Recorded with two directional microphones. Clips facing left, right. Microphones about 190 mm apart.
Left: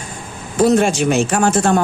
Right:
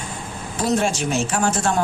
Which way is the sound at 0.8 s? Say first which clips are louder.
Left 6 dB; 70° left (ahead or behind).